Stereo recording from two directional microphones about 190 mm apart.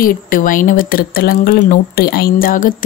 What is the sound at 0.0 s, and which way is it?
Speech, 45° left (ahead or behind).